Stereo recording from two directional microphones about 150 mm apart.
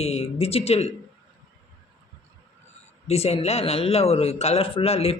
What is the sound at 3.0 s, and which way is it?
Speech, 45° left (ahead or behind).